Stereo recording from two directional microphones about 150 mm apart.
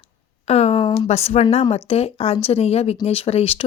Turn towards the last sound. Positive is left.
turn(degrees=40)  # may be behind; listen again after turning